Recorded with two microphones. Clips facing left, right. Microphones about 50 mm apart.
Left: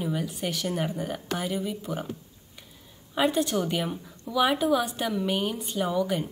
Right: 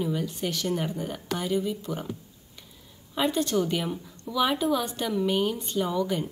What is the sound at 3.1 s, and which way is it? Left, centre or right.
A woman's voice, centre.